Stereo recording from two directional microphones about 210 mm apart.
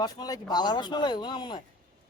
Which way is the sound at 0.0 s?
20° left (ahead or behind).